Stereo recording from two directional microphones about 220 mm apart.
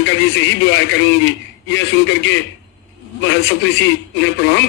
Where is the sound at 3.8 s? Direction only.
55° left (ahead or behind).